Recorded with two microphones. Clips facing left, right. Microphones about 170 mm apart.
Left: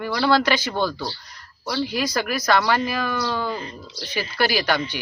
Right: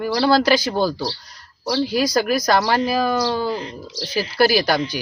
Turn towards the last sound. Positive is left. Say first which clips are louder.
# right 5 dB
turn(degrees=-35)  # may be behind; listen again after turning